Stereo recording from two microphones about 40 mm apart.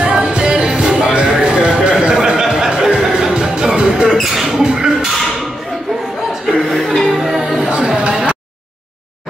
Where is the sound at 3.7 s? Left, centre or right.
Right.